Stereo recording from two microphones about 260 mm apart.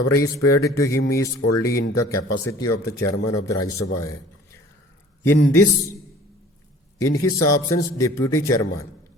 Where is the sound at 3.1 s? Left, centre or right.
Left.